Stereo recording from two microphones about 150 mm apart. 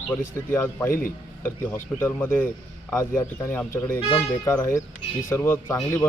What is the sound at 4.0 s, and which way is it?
Speech, 35° left (ahead or behind).